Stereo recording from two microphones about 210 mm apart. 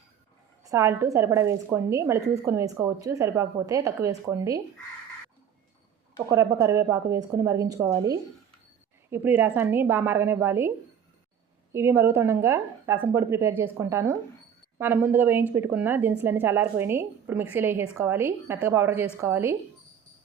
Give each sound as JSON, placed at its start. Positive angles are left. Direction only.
{"t": 0.6, "sound": "a woman's voice", "side_deg": -15}
{"t": 6.2, "sound": "a woman's voice", "side_deg": -15}
{"t": 11.7, "sound": "a woman's voice", "side_deg": -10}